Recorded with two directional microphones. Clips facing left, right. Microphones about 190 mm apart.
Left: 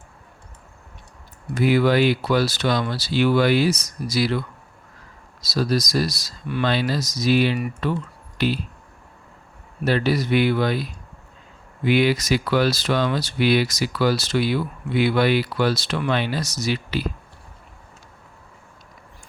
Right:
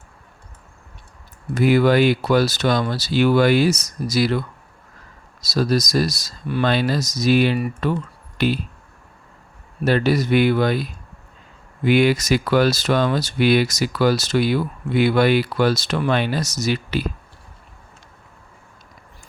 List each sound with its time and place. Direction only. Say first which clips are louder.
1.5 s speech: right 2 dB; 45° right (ahead or behind)
9.8 s speech: right 3 dB; 50° right (ahead or behind)
11.9 s speech: right 2 dB; 50° right (ahead or behind)